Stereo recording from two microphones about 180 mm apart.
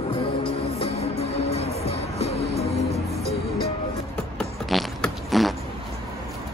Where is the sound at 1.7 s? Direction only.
35° right (ahead or behind).